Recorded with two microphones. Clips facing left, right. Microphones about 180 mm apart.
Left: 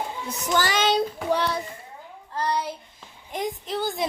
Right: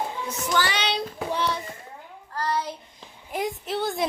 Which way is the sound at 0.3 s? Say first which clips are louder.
Left 2 dB; 45° left (ahead or behind).